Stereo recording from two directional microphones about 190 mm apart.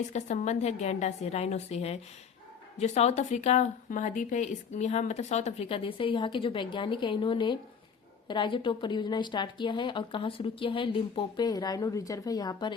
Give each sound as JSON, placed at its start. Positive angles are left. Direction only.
{"t": 0.1, "sound": "a woman's voice", "side_deg": 35}